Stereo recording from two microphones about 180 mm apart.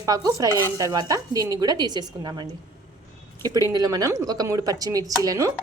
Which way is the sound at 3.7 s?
20° right (ahead or behind).